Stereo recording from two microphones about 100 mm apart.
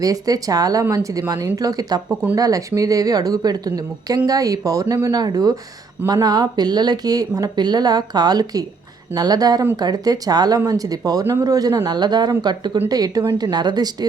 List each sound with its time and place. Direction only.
0.0 s speech: 35° right (ahead or behind)